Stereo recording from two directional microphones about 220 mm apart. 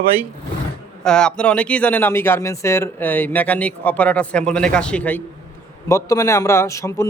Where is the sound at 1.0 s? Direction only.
5° left (ahead or behind).